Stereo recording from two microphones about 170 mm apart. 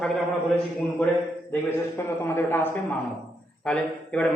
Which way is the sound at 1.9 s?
15° left (ahead or behind).